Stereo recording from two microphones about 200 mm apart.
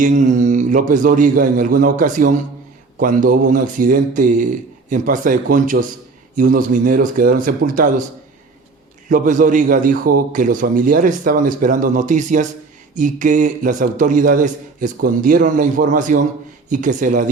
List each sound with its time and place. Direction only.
0.0 s a man's voice: 40° right (ahead or behind)
9.0 s a man's voice: 40° right (ahead or behind)